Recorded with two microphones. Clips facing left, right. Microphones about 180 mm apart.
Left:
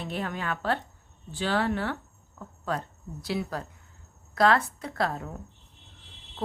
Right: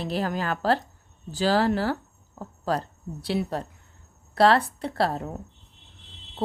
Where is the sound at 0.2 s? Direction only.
35° right (ahead or behind).